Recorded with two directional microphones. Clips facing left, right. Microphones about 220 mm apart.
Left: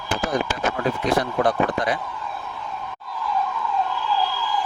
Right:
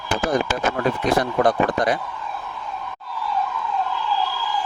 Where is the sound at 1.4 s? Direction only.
45° right (ahead or behind).